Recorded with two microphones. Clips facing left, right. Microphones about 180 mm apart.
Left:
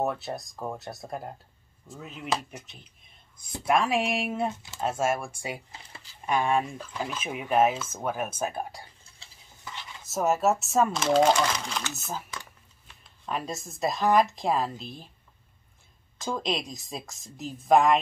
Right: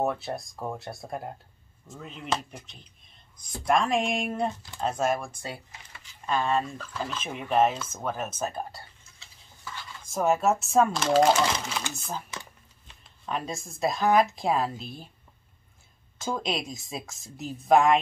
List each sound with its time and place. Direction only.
0.0 s speech: centre (ahead or behind)
5.7 s a sound: 30° left (ahead or behind)
6.2 s speech: 15° left (ahead or behind)
9.7 s a sound: 20° left (ahead or behind)
10.0 s speech: centre (ahead or behind)
11.9 s speech: 5° left (ahead or behind)
16.2 s speech: centre (ahead or behind)